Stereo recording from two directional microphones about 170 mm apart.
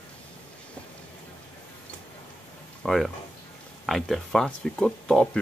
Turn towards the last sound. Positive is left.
turn(degrees=5)  # may be behind; listen again after turning